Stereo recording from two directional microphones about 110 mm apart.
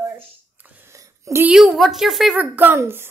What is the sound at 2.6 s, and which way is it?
Speech, 20° right (ahead or behind).